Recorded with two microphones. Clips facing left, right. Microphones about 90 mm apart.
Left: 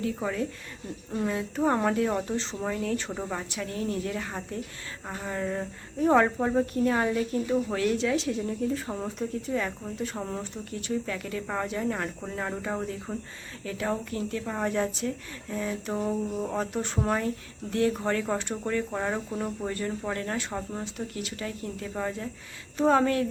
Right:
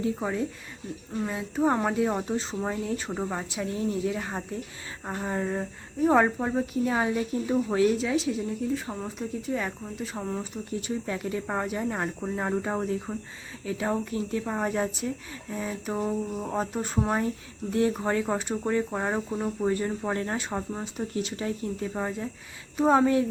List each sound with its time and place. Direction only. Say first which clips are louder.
0.0 s speech: right 1 dB; 20° right (ahead or behind)
1.1 s speech: left 1 dB; 5° right (ahead or behind); by 5.5 s 25° right (ahead or behind)
6.0 s speech: even; 5° right (ahead or behind)
9.5 s speech: even; 10° right (ahead or behind)
10.7 s speech: even; 20° right (ahead or behind)
17.7 s speech: right 1 dB; 20° right (ahead or behind)